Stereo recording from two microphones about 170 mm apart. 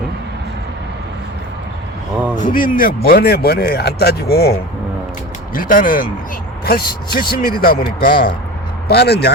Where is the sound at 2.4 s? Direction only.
55° left (ahead or behind).